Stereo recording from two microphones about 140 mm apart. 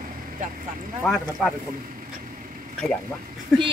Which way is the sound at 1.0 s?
Centre (ahead or behind).